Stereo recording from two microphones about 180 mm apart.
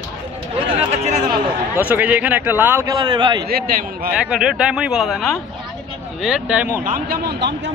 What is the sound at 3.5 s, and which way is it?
Speech, 55° right (ahead or behind).